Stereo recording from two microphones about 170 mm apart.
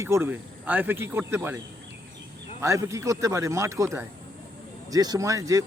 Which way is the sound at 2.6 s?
15° right (ahead or behind).